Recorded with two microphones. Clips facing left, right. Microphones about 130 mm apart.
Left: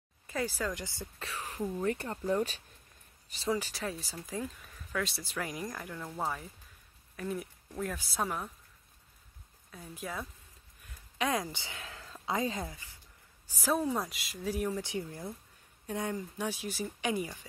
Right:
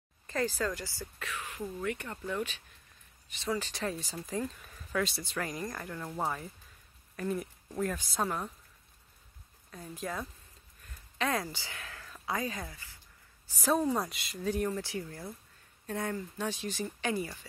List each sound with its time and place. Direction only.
0.3 s speech: 10° left (ahead or behind)
1.3 s speech: 35° left (ahead or behind)
3.5 s speech: 5° left (ahead or behind)
9.7 s speech: 5° left (ahead or behind)
11.1 s speech: 15° left (ahead or behind)
13.5 s speech: 5° left (ahead or behind)
14.8 s speech: 20° left (ahead or behind)